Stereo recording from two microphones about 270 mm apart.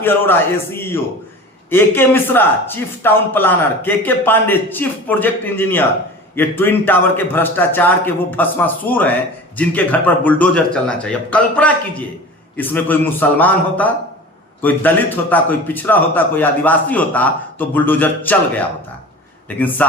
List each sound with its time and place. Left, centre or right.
0.0 s a man's voice: centre